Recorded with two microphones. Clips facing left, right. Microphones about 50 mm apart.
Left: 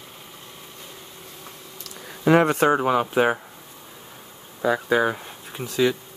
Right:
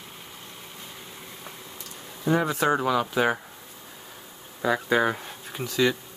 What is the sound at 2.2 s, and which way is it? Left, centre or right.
Speech, left.